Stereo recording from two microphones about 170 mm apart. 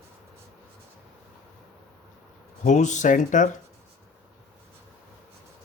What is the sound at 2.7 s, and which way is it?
Speech, 45° left (ahead or behind).